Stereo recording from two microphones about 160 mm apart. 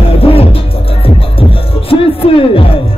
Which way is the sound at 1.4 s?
35° left (ahead or behind).